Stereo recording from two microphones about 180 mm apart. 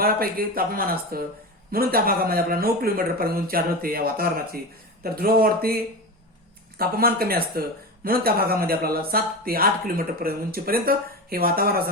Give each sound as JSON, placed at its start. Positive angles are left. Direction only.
{"t": 0.0, "sound": "speech", "side_deg": -55}